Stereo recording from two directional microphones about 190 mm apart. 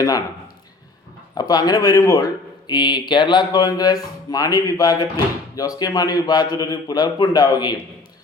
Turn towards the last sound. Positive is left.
turn(degrees=20)  # may be behind; listen again after turning